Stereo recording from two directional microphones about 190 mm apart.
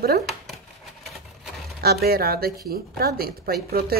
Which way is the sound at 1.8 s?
55° right (ahead or behind).